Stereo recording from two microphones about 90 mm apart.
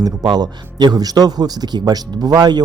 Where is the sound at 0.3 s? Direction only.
50° right (ahead or behind).